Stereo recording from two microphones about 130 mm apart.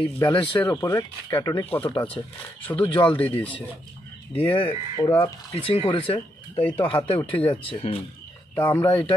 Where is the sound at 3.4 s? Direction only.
10° left (ahead or behind).